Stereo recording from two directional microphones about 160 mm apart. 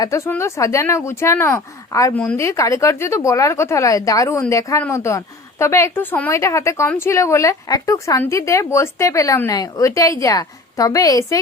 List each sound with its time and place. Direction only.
0.0 s speech: 20° left (ahead or behind)